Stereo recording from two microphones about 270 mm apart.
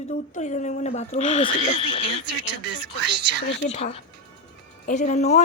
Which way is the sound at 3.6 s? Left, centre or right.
Left.